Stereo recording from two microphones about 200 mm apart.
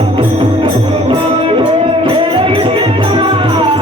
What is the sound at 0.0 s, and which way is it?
Music, 25° right (ahead or behind).